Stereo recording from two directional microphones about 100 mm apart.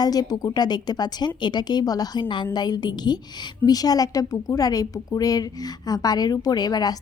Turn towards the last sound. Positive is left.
turn(degrees=40)  # may be behind; listen again after turning